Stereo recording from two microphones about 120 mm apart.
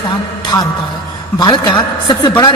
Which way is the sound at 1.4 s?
35° left (ahead or behind).